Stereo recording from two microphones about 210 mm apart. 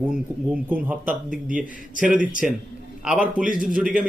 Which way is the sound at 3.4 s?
40° right (ahead or behind).